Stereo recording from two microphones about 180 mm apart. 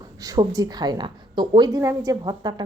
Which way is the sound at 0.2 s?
20° right (ahead or behind).